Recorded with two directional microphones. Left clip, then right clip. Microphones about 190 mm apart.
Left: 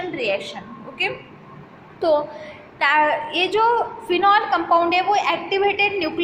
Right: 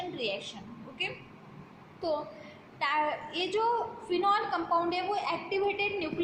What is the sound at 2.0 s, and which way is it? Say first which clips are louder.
A child's voice: left 14 dB; 20° left (ahead or behind).